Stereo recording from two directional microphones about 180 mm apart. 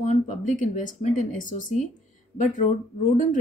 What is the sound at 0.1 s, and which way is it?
Speech, 45° left (ahead or behind).